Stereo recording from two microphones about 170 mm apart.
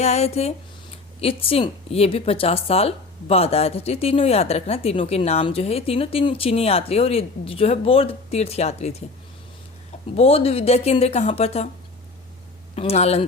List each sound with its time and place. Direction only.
0.0 s speech: 40° left (ahead or behind)
10.2 s speech: 35° left (ahead or behind)
12.7 s speech: 35° left (ahead or behind)